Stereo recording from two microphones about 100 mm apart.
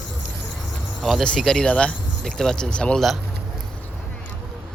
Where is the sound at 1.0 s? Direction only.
Centre (ahead or behind).